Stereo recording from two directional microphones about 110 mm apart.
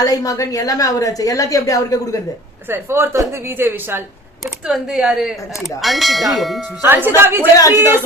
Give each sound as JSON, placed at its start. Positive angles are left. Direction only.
{"t": 0.0, "sound": "speech", "side_deg": 30}
{"t": 2.6, "sound": "a woman's voice", "side_deg": -20}
{"t": 4.4, "sound": "speech", "side_deg": -5}
{"t": 6.8, "sound": "a woman's voice", "side_deg": -20}
{"t": 7.5, "sound": "speech", "side_deg": 30}